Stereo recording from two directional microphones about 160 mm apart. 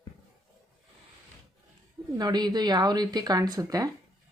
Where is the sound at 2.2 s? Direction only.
25° right (ahead or behind).